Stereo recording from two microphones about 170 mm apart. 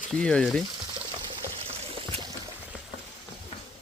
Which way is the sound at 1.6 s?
35° right (ahead or behind).